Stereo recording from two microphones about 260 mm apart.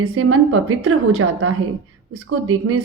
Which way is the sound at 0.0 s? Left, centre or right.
Right.